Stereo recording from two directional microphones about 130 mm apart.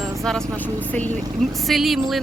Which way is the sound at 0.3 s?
10° left (ahead or behind).